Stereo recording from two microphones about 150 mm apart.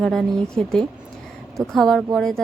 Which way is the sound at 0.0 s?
5° left (ahead or behind).